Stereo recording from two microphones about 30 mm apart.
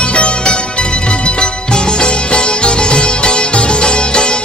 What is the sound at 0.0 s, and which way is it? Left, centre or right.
Music, left.